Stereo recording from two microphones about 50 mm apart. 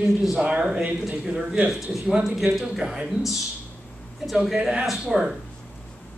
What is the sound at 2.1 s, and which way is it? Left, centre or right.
Speech, centre.